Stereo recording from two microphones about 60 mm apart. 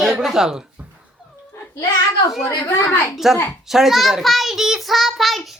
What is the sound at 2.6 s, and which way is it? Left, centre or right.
Speech, left.